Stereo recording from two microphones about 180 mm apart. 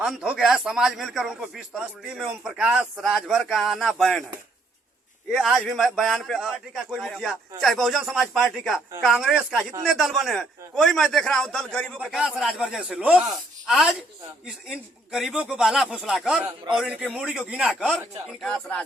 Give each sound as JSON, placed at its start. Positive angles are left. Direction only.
{"t": 0.0, "sound": "speech", "side_deg": -5}
{"t": 5.3, "sound": "speech", "side_deg": 0}